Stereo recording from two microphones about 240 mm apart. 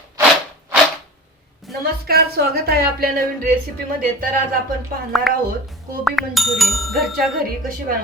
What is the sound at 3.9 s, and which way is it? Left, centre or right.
Speech, right.